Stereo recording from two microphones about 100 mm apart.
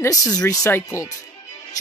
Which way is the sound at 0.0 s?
35° left (ahead or behind).